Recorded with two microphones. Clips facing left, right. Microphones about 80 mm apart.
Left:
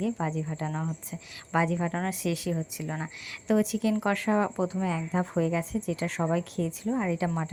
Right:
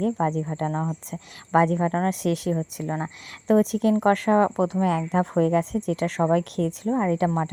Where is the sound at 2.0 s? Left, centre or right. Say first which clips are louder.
Right 6 dB; right.